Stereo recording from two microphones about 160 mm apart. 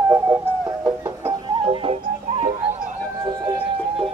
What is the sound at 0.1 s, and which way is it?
Music, 20° right (ahead or behind).